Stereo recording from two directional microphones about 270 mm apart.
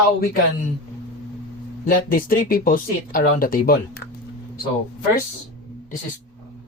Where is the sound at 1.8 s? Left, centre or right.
Left.